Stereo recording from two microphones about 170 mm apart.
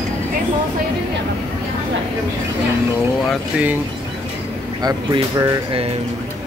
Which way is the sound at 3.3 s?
5° right (ahead or behind).